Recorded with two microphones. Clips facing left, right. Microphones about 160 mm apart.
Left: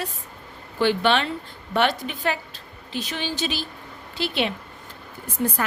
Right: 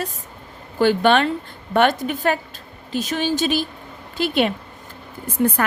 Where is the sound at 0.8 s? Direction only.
45° right (ahead or behind).